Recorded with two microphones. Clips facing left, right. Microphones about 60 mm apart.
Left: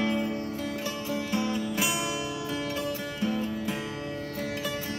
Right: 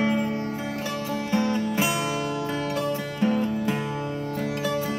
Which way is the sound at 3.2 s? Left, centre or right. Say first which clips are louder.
Right 7 dB; right.